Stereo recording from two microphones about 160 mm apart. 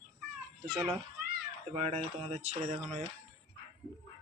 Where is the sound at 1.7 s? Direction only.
40° right (ahead or behind).